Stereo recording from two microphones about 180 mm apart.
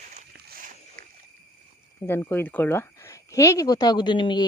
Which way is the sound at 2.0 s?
10° left (ahead or behind).